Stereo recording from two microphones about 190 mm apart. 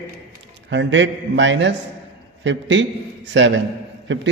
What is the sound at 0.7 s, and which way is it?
A man's voice, 75° right (ahead or behind).